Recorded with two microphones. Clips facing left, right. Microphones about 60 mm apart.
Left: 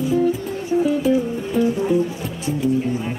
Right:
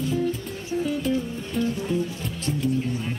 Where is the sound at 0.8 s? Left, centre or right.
Centre.